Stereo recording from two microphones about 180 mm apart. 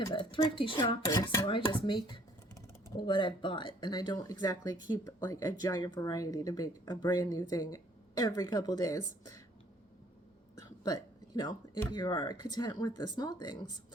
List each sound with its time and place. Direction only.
0.1 s speech: 25° left (ahead or behind)
10.8 s speech: 25° left (ahead or behind)